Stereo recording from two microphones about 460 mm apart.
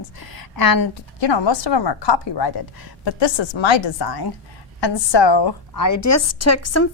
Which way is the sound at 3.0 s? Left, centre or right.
Left.